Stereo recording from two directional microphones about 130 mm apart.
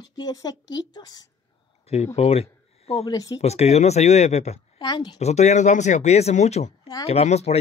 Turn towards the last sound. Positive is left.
turn(degrees=55)  # may be behind; listen again after turning